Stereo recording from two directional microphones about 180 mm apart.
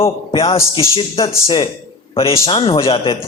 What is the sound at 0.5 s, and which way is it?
Speech, 15° left (ahead or behind).